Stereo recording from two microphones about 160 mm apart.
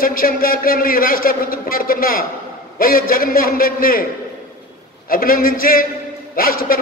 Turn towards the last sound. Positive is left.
turn(degrees=60)  # may be behind; listen again after turning